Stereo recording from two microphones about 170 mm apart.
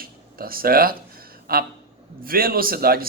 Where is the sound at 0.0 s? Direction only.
60° right (ahead or behind).